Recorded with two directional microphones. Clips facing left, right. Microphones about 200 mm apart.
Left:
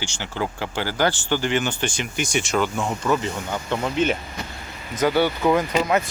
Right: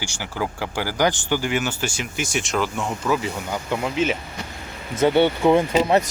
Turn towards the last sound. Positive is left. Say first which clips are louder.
# right 3 dB
turn(degrees=-35)  # may be behind; listen again after turning